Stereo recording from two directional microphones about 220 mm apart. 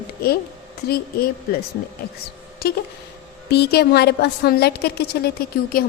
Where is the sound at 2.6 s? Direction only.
45° left (ahead or behind).